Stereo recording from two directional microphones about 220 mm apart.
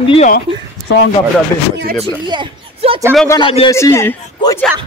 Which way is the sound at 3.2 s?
15° left (ahead or behind).